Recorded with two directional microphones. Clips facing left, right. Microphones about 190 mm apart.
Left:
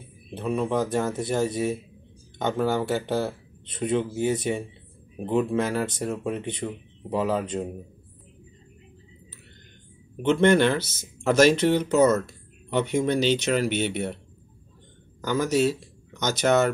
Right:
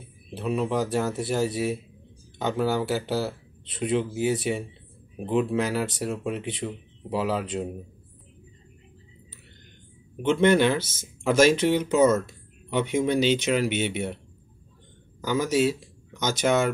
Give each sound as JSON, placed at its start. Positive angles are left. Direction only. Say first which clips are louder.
{"t": 0.4, "sound": "speech", "louder": "left 1 dB", "side_deg": -5}
{"t": 10.3, "sound": "speech", "louder": "left 1 dB", "side_deg": -5}
{"t": 10.8, "sound": "speech", "louder": "even", "side_deg": -50}
{"t": 11.2, "sound": "speech", "louder": "left 1 dB", "side_deg": -10}
{"t": 15.2, "sound": "speech", "louder": "even", "side_deg": -10}